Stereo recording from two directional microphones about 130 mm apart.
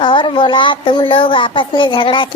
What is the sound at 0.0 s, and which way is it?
Child singing, 40° left (ahead or behind).